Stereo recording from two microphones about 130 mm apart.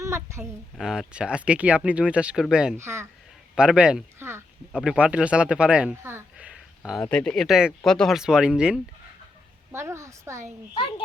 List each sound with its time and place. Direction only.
0.0 s a sound: 20° right (ahead or behind)
0.8 s speech: 5° right (ahead or behind)
2.7 s a woman's voice: 20° right (ahead or behind)
3.5 s speech: 5° right (ahead or behind)
4.2 s speech: 20° right (ahead or behind)
4.7 s speech: 5° right (ahead or behind)
6.3 s a sound: 5° right (ahead or behind)
7.0 s speech: 10° left (ahead or behind)
7.4 s speech: centre (ahead or behind)
9.7 s a woman's voice: 20° right (ahead or behind)